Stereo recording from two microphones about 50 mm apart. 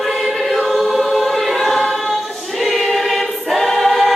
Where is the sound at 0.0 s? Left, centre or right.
Centre.